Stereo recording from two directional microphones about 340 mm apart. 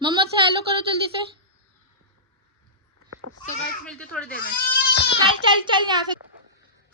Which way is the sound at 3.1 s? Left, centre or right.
Right.